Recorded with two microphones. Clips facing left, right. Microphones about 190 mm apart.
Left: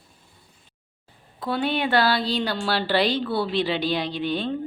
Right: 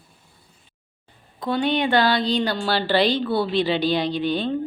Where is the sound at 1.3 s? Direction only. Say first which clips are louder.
Right 3 dB; 5° left (ahead or behind).